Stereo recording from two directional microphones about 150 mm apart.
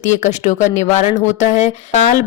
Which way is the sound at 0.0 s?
55° left (ahead or behind).